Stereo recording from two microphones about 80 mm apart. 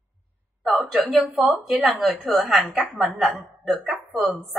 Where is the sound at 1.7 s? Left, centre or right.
Centre.